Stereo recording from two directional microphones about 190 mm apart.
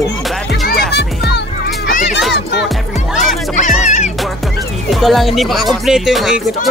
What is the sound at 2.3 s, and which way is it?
Music, 60° left (ahead or behind).